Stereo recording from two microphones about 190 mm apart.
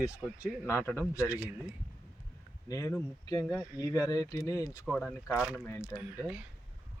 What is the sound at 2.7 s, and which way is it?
Speech, 15° left (ahead or behind).